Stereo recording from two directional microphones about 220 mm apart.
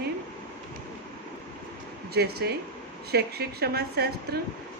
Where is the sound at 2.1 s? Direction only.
45° right (ahead or behind).